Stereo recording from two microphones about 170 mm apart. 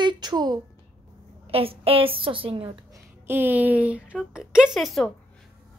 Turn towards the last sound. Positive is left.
turn(degrees=0)  # may be behind; listen again after turning